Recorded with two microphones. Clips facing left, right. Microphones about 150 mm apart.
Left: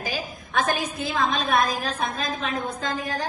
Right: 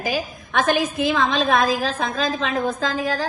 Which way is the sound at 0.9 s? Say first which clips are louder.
Right 5 dB; 90° right.